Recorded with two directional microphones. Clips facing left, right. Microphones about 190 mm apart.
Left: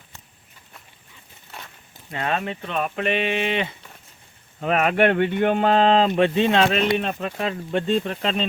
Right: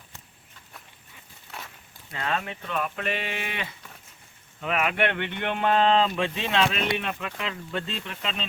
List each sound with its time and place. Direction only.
1.5 s walk: centre (ahead or behind)
2.1 s a sound: 25° left (ahead or behind)
4.6 s speech: 40° left (ahead or behind)